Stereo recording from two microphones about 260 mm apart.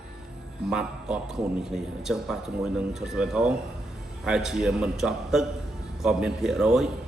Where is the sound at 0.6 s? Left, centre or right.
Centre.